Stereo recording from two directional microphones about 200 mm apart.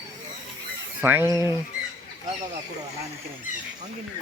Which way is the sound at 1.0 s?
10° right (ahead or behind).